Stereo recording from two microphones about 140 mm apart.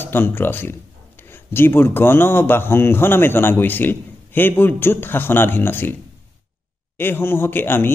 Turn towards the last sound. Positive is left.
turn(degrees=15)  # may be behind; listen again after turning